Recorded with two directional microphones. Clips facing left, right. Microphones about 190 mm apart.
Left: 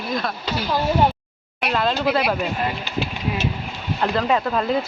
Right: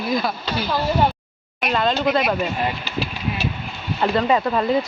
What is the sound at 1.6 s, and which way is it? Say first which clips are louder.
Speech: right 1 dB; 5° left (ahead or behind).